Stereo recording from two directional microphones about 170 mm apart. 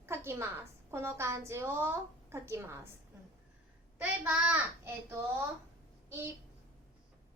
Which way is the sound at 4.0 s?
5° right (ahead or behind).